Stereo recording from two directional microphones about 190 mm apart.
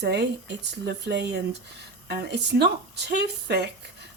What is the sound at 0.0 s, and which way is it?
Speech, 60° right (ahead or behind).